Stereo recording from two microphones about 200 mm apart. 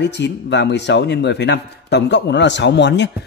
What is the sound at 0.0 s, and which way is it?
A man's voice, 60° left (ahead or behind).